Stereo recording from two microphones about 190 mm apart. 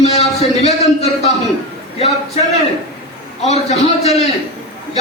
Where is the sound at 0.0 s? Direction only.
35° left (ahead or behind).